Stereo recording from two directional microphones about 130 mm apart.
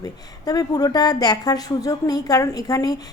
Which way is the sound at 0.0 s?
30° left (ahead or behind).